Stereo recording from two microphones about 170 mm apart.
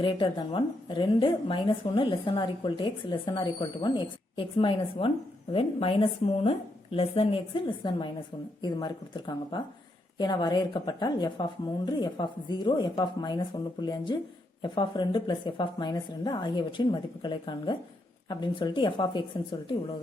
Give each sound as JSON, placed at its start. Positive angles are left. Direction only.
{"t": 0.0, "sound": "a woman's voice", "side_deg": 30}